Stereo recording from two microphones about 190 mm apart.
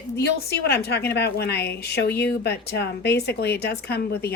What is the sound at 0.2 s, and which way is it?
A woman's voice, 60° left (ahead or behind).